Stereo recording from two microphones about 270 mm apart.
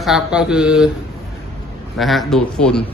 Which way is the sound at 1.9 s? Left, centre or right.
Centre.